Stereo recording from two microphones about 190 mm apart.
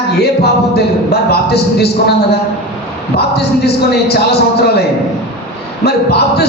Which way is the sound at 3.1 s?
60° left (ahead or behind).